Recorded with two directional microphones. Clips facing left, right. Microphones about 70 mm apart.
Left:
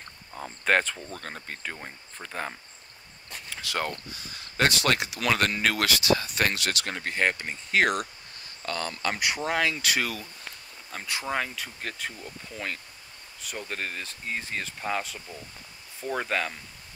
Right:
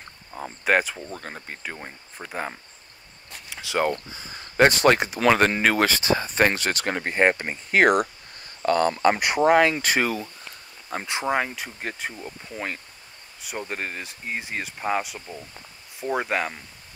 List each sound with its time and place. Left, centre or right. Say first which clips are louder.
0.3 s speech: right 2 dB; centre
3.4 s a sound: right 7 dB; centre
3.9 s speech: right 6 dB; right